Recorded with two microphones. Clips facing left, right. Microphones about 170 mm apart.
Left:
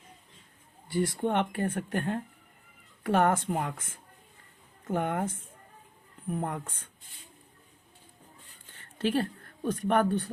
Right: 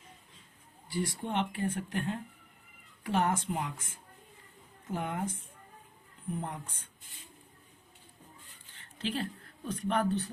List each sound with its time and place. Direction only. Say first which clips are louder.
0.9 s speech: left 6 dB; 55° left (ahead or behind)
4.9 s speech: left 5 dB; 55° left (ahead or behind)
6.3 s speech: left 5 dB; 55° left (ahead or behind)
9.0 s a woman's voice: left 7 dB; 60° left (ahead or behind)